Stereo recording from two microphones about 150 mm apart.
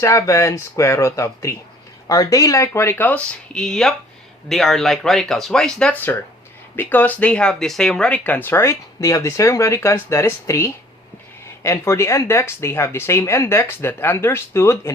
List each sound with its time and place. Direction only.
0.0 s speech: 20° left (ahead or behind)